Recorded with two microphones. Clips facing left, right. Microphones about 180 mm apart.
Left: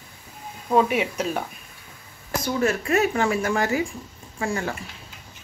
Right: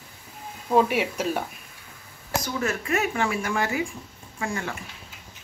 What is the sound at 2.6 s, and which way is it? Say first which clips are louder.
Speech: left 6 dB; 35° left (ahead or behind).